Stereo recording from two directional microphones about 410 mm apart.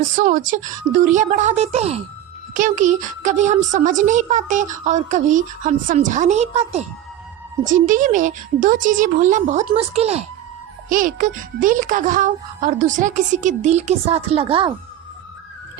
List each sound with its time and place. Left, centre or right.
0.0 s a child's voice: centre